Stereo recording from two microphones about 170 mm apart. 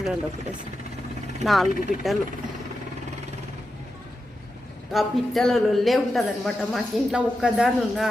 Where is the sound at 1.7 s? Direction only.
60° left (ahead or behind).